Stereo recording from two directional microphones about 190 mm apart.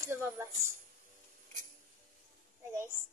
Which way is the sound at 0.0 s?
15° right (ahead or behind).